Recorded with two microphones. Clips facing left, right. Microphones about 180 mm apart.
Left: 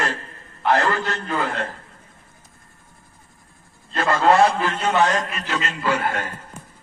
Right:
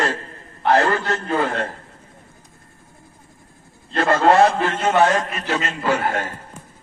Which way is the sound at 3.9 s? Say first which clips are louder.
Right 2 dB; 55° right (ahead or behind).